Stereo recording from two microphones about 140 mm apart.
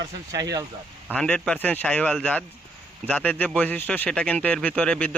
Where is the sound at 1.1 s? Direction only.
5° left (ahead or behind).